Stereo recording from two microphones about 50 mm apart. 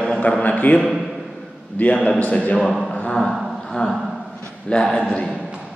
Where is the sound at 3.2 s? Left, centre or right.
Centre.